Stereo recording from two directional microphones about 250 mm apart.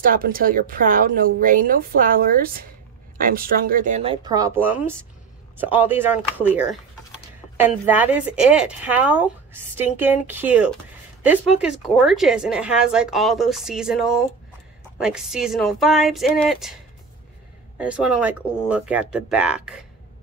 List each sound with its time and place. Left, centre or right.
0.0 s a woman's voice: right; by 16.7 s centre
17.7 s a woman's voice: centre